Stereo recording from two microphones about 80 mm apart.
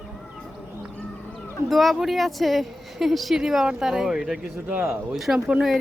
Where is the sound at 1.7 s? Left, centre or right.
Centre.